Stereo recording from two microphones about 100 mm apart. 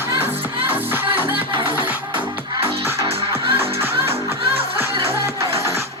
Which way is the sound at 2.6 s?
80° right.